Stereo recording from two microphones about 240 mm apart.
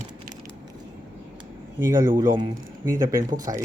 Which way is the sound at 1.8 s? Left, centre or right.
Centre.